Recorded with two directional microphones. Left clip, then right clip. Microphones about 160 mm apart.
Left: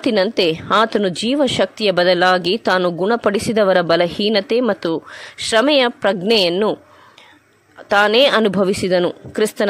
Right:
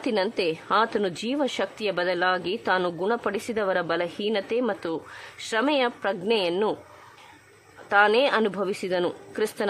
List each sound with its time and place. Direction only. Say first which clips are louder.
0.0 s a woman's voice: left 9 dB; 35° left (ahead or behind)
7.9 s a woman's voice: left 7 dB; 40° left (ahead or behind)